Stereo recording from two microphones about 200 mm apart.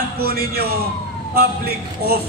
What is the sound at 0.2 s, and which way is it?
A man's voice, 50° right (ahead or behind).